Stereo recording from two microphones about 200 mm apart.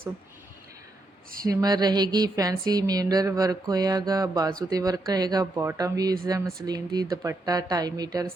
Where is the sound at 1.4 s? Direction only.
20° right (ahead or behind).